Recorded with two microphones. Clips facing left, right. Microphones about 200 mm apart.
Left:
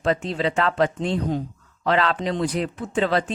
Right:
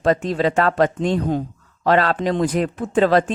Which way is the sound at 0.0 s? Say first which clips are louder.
Right 5 dB; 45° right (ahead or behind).